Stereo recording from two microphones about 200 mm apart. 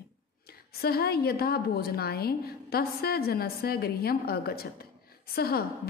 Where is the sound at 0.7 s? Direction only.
50° left (ahead or behind).